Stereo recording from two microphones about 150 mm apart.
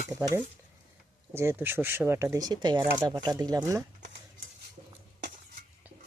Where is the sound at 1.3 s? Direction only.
15° right (ahead or behind).